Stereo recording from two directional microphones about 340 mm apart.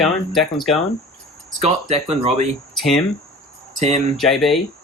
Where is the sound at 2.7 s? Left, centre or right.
Centre.